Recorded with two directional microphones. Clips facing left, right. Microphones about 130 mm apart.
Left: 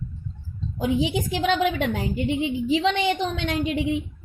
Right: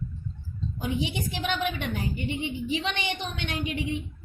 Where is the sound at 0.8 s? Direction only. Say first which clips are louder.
Left 7 dB; 90° left.